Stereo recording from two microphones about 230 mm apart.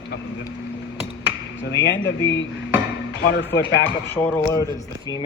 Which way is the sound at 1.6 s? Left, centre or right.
Left.